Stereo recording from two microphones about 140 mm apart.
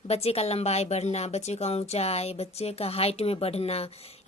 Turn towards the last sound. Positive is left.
turn(degrees=45)  # may be behind; listen again after turning